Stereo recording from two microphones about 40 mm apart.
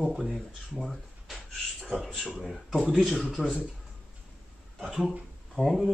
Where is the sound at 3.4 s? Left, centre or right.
Left.